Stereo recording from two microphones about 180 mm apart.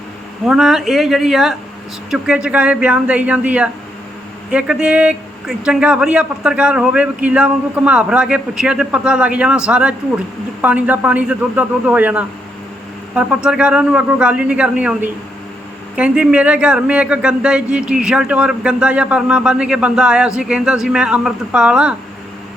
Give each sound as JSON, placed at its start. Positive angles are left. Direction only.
{"t": 0.4, "sound": "a man's voice", "side_deg": 0}